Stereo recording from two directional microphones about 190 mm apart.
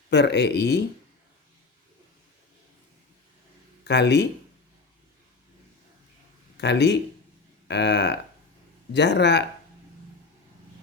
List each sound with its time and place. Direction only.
0.1 s speech: 60° left (ahead or behind)
3.8 s speech: 65° left (ahead or behind)
6.6 s speech: 65° left (ahead or behind)